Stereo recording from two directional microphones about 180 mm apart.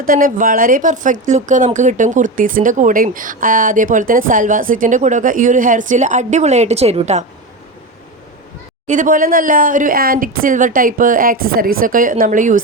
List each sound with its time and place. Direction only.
0.0 s a woman's voice: 50° right (ahead or behind)
8.9 s a woman's voice: 45° right (ahead or behind)